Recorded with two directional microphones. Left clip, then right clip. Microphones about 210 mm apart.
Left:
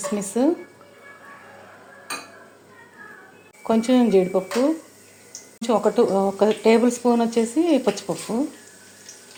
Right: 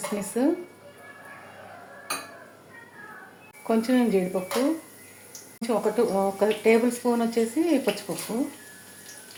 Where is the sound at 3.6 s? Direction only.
35° left (ahead or behind).